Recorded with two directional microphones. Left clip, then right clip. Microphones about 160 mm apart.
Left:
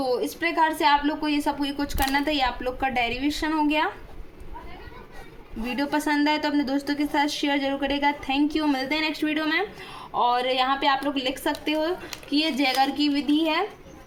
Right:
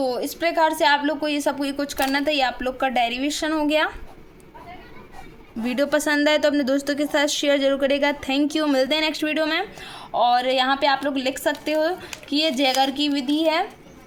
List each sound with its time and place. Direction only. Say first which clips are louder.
0.0 s a woman's voice: right 2 dB; 45° right (ahead or behind)
5.6 s a woman's voice: right 4 dB; 50° right (ahead or behind)